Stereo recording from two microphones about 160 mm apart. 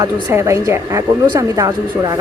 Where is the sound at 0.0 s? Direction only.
15° right (ahead or behind).